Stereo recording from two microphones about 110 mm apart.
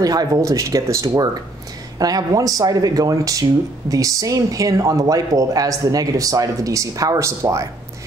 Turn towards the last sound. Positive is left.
turn(degrees=-30)  # may be behind; listen again after turning